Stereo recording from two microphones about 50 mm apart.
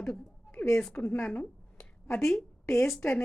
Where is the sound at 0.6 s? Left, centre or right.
Left.